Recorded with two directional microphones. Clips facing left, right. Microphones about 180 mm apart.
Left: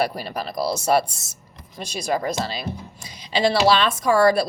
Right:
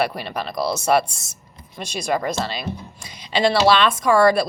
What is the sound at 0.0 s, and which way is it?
Speech, 35° left (ahead or behind).